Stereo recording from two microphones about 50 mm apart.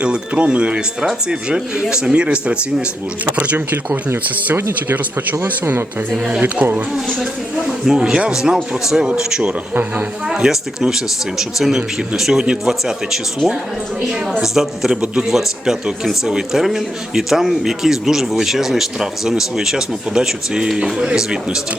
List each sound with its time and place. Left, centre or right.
0.0 s speech: right
4.9 s speech: right
7.9 s a man's voice: centre